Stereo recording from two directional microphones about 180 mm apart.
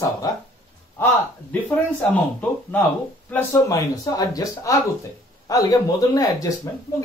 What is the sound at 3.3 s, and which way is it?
Speech, 15° left (ahead or behind).